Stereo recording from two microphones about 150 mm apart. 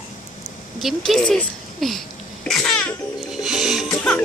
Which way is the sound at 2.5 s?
Centre (ahead or behind).